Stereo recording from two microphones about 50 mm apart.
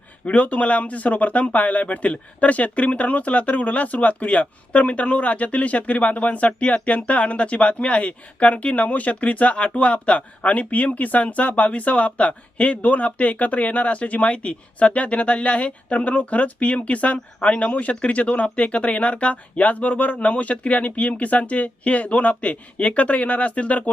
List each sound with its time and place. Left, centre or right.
0.3 s speech: left